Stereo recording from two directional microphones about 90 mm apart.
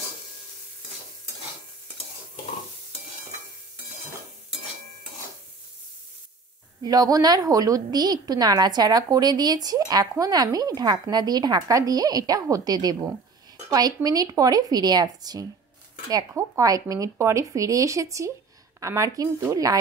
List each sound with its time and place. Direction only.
6.8 s a woman's voice: 45° right (ahead or behind)